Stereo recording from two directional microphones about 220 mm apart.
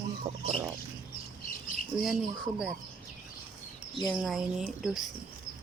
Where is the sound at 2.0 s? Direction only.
Centre (ahead or behind).